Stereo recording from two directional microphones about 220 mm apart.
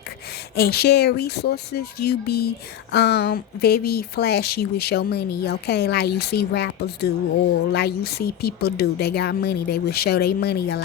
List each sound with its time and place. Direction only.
0.5 s speech: 45° left (ahead or behind)